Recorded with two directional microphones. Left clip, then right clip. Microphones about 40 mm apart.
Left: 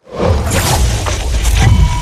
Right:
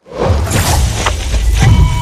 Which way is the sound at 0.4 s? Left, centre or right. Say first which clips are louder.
Left 1 dB; centre.